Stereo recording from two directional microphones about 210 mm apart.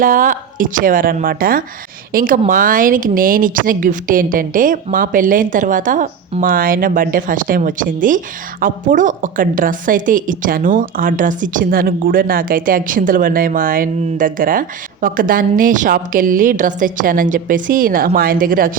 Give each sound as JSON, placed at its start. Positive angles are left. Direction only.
{"t": 0.0, "sound": "a woman's voice", "side_deg": -40}